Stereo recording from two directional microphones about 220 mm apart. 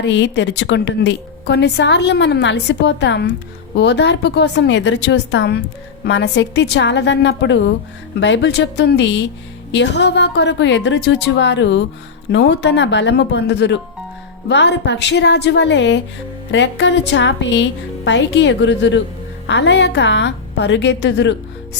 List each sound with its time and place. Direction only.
0.0 s a woman's voice: 55° left (ahead or behind)